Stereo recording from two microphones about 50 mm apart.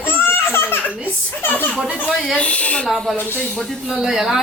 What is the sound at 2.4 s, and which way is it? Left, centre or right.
Speech, left.